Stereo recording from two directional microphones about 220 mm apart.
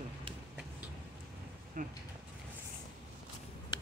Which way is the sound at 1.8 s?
35° right (ahead or behind).